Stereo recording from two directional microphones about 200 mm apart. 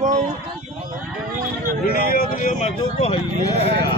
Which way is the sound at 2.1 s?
45° left (ahead or behind).